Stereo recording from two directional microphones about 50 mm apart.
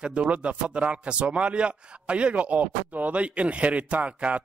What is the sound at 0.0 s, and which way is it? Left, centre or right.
Speech, right.